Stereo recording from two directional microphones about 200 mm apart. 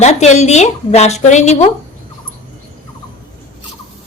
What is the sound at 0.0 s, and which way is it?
A woman's voice, 35° left (ahead or behind).